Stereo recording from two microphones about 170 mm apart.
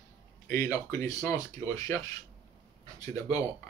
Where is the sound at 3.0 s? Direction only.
20° left (ahead or behind).